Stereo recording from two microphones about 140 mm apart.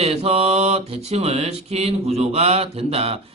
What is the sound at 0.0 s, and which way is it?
Speech, 50° right (ahead or behind).